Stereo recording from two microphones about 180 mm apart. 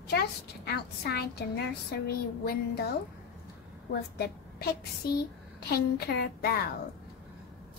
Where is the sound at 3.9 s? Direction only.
65° left (ahead or behind).